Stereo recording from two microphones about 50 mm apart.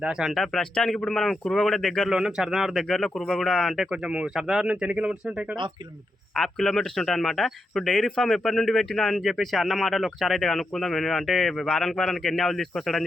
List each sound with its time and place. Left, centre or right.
0.0 s speech: centre
0.3 s a man's voice: centre
2.0 s speech: centre
2.8 s a man's voice: centre
3.8 s speech: centre
6.3 s speech: centre